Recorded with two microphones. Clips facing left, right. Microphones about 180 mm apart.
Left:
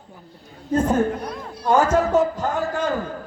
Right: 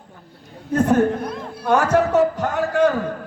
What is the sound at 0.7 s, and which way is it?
A man's voice, 70° right (ahead or behind).